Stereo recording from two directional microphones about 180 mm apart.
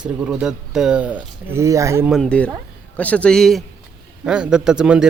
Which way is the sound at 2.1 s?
Centre (ahead or behind).